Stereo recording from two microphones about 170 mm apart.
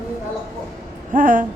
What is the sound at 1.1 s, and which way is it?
Speech, 50° right (ahead or behind).